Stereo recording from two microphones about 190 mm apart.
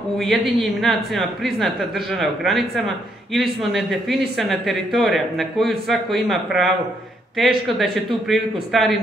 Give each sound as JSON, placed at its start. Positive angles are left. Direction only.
{"t": 0.2, "sound": "speech", "side_deg": 0}